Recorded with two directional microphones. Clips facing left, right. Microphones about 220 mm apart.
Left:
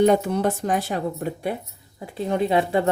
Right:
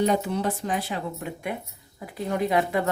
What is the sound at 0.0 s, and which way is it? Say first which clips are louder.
A woman's voice: left 5 dB; 50° left (ahead or behind).